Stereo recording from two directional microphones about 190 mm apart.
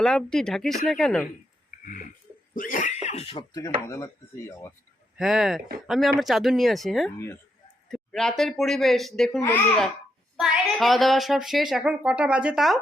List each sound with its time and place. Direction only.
0.0 s a woman's voice: 5° left (ahead or behind)
1.8 s a sound: 45° left (ahead or behind)
2.6 s speech: 45° left (ahead or behind); by 4.5 s 15° left (ahead or behind)
5.1 s a woman's voice: centre (ahead or behind)
9.4 s a child's voice: 15° left (ahead or behind)
10.3 s a woman's voice: centre (ahead or behind)